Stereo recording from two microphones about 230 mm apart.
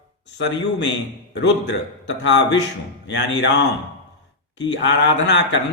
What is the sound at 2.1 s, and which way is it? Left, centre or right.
Speech, left.